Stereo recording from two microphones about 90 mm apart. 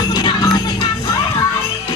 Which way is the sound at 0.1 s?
55° left (ahead or behind).